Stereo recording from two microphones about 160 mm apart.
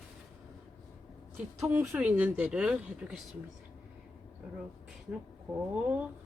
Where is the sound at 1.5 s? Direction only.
20° right (ahead or behind).